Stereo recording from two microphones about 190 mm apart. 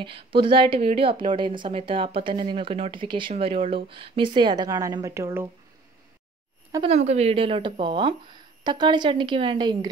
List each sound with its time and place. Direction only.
0.0 s speech: 25° right (ahead or behind)
6.9 s speech: 35° right (ahead or behind)